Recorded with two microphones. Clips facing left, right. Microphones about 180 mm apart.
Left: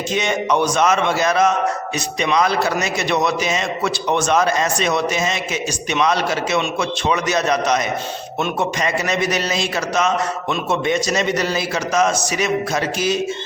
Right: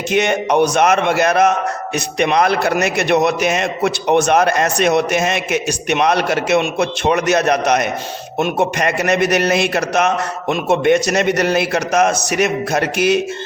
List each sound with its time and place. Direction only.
0.1 s a man's voice: 60° right (ahead or behind)